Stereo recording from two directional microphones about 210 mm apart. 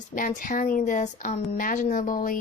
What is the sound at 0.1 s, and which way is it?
Speech, 40° left (ahead or behind).